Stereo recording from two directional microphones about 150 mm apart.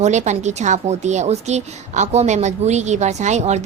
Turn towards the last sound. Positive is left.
turn(degrees=-50)  # may be behind; listen again after turning